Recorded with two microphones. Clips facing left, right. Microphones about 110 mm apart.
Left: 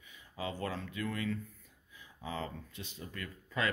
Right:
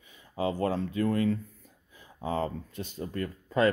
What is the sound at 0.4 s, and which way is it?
Speech, 35° right (ahead or behind).